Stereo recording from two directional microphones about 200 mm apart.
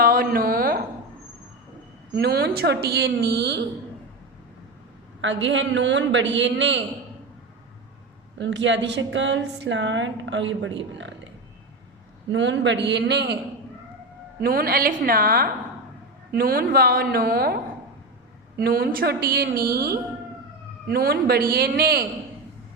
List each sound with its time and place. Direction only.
0.0 s a sound: 45° right (ahead or behind)
2.1 s speech: 55° right (ahead or behind)
5.2 s speech: 70° right (ahead or behind)
8.4 s speech: 65° right (ahead or behind)
12.3 s speech: 65° right (ahead or behind)
14.4 s a woman's voice: 50° right (ahead or behind)